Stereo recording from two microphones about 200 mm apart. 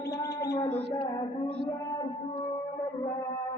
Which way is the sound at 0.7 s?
60° right (ahead or behind).